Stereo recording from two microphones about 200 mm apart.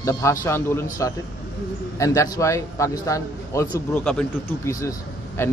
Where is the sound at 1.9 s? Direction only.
15° left (ahead or behind).